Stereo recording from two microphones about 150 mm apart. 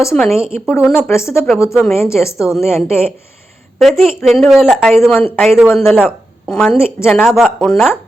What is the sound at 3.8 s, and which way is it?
Speech, centre (ahead or behind).